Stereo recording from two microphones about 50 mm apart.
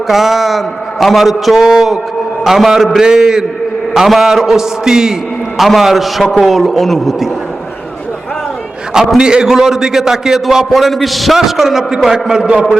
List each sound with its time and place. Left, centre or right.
0.1 s a man's voice: centre
9.1 s a man's voice: centre